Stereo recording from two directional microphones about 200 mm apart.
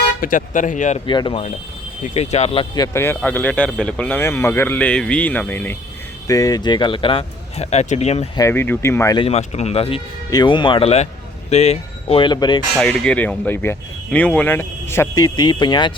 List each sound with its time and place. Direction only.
0.2 s speech: 45° left (ahead or behind)
1.0 s speech: 25° left (ahead or behind)
8.4 s speech: 10° left (ahead or behind)
9.1 s speech: 30° left (ahead or behind)
12.7 s speech: 5° left (ahead or behind); by 15.9 s 20° left (ahead or behind)